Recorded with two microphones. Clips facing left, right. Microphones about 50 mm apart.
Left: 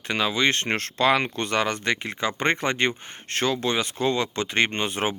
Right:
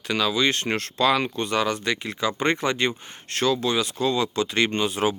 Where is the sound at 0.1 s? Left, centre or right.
Left.